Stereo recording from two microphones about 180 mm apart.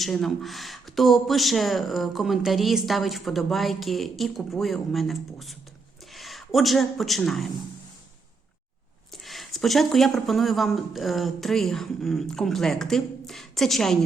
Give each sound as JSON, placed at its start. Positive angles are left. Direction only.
{"t": 0.0, "sound": "a man's voice", "side_deg": 0}
{"t": 9.1, "sound": "speech", "side_deg": 0}